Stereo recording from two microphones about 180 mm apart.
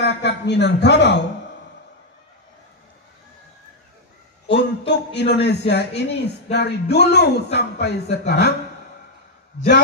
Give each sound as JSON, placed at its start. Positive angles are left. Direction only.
{"t": 0.0, "sound": "a man's voice", "side_deg": 70}
{"t": 4.5, "sound": "a sound", "side_deg": 75}
{"t": 6.5, "sound": "music", "side_deg": 65}
{"t": 7.5, "sound": "a woman's voice", "side_deg": 65}
{"t": 9.6, "sound": "a woman's voice", "side_deg": 65}